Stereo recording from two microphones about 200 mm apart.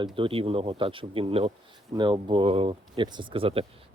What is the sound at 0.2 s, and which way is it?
Speech, 30° right (ahead or behind).